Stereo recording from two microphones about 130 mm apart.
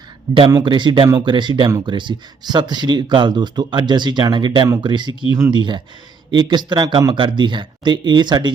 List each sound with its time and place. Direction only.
0.5 s speech: 35° right (ahead or behind)